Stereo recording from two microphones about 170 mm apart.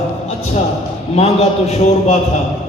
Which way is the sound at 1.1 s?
40° left (ahead or behind).